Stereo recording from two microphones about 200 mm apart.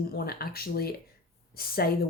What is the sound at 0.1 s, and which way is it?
Speech, 50° left (ahead or behind).